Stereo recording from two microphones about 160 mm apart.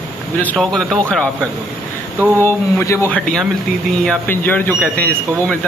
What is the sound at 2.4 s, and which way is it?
Speech, 15° left (ahead or behind).